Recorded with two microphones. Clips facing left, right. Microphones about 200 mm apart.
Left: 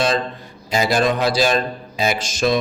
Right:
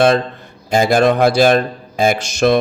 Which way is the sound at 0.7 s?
50° right (ahead or behind).